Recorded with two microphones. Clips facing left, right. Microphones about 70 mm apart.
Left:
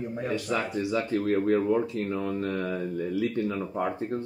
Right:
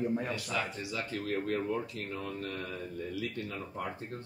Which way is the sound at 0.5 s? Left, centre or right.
Left.